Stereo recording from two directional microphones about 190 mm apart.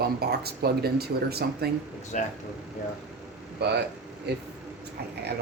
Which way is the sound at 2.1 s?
40° left (ahead or behind).